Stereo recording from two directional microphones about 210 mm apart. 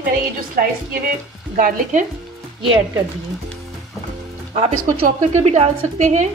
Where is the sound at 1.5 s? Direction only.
40° right (ahead or behind).